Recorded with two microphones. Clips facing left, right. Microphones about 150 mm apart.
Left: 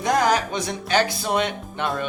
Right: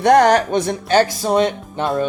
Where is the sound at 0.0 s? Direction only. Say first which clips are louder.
Right 8 dB; 65° right (ahead or behind).